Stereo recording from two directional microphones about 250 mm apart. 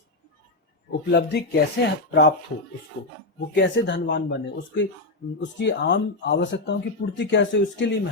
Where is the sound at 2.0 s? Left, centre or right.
Left.